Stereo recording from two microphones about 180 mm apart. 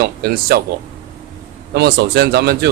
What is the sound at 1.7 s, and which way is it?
Speech, 65° right (ahead or behind).